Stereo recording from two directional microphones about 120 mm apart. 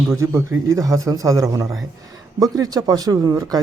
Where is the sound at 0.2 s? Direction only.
25° right (ahead or behind).